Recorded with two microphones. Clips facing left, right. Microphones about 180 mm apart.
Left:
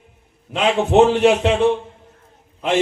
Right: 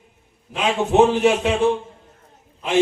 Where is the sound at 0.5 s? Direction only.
65° left (ahead or behind).